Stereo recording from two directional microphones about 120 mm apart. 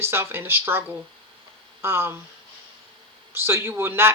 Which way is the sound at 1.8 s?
20° right (ahead or behind).